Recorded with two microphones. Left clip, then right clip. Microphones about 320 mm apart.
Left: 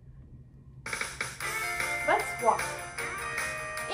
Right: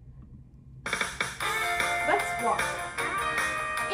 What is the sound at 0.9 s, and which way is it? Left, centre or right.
Music, centre.